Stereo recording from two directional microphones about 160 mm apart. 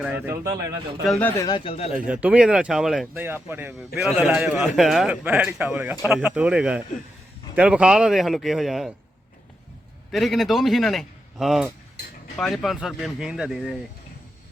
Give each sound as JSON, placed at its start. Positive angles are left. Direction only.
{"t": 0.0, "sound": "a man's voice", "side_deg": -10}
{"t": 1.0, "sound": "a man's voice", "side_deg": 0}
{"t": 1.4, "sound": "speech", "side_deg": 25}
{"t": 2.0, "sound": "a man's voice", "side_deg": -5}
{"t": 3.2, "sound": "a man's voice", "side_deg": -15}
{"t": 10.1, "sound": "a man's voice", "side_deg": 0}